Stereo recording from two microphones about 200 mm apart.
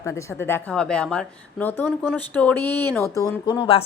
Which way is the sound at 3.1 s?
15° left (ahead or behind).